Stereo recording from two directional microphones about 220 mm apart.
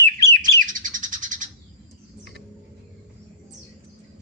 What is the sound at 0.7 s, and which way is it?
Bird, 35° right (ahead or behind).